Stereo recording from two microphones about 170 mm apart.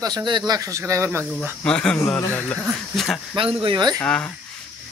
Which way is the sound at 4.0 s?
10° left (ahead or behind).